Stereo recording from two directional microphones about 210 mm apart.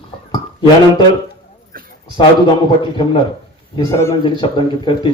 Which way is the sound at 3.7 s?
15° left (ahead or behind).